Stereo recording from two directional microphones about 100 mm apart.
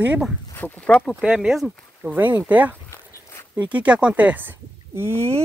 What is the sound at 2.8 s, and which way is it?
Walk, 30° left (ahead or behind).